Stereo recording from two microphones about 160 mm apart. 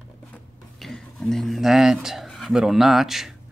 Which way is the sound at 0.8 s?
Centre (ahead or behind).